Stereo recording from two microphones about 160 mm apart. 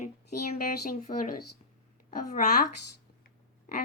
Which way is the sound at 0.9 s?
60° left (ahead or behind).